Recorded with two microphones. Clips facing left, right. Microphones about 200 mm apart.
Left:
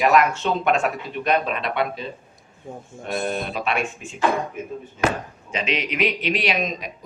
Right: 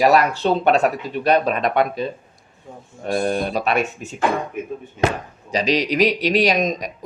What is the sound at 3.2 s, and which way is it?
A man's voice, 40° right (ahead or behind).